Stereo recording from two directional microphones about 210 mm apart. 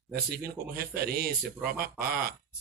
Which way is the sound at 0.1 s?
45° right (ahead or behind).